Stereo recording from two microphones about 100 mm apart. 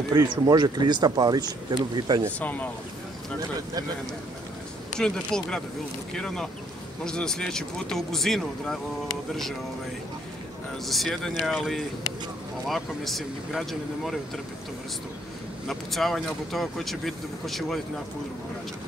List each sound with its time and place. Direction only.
0.1 s speech: 40° right (ahead or behind)
2.4 s speech: 15° left (ahead or behind)
4.9 s speech: 5° left (ahead or behind)
10.9 s speech: centre (ahead or behind)
15.6 s speech: centre (ahead or behind)